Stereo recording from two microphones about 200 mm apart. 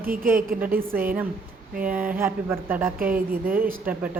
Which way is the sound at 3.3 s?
45° right (ahead or behind).